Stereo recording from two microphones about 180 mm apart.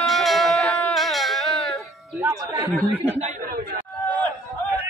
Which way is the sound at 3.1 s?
45° right (ahead or behind).